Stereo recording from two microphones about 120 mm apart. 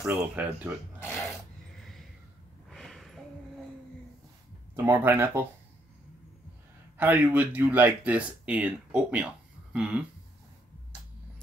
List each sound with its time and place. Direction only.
0.1 s speech: 15° right (ahead or behind)
1.8 s a sound: centre (ahead or behind)
4.7 s speech: 20° right (ahead or behind)
7.0 s speech: 15° right (ahead or behind)